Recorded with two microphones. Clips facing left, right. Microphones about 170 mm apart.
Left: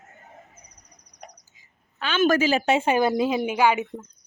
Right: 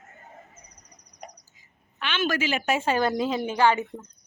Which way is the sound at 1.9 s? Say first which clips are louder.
Left 6 dB; 40° left (ahead or behind).